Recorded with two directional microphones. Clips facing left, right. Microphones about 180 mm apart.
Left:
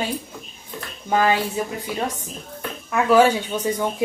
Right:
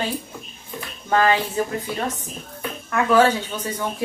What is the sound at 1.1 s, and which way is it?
Speech, 10° left (ahead or behind).